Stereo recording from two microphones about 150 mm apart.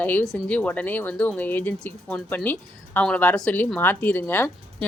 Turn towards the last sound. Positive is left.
turn(degrees=15)  # may be behind; listen again after turning